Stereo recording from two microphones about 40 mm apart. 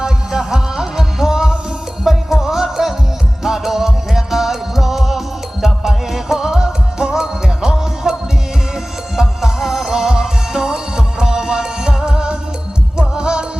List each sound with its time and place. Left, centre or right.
0.0 s music: centre
9.1 s music: centre